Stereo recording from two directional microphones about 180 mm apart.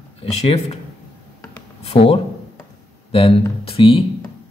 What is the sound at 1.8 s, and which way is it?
A man's voice, 35° left (ahead or behind).